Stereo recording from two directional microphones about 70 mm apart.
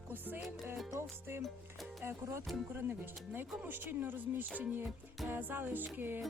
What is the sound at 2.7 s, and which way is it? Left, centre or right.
Speech, right.